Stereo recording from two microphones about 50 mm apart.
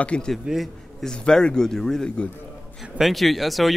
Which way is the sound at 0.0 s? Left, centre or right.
Left.